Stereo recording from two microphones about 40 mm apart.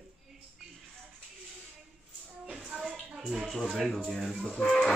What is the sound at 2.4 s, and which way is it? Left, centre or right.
Music, centre.